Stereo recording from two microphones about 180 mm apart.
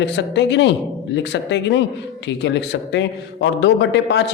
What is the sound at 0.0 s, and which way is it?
A man's voice, 75° left (ahead or behind).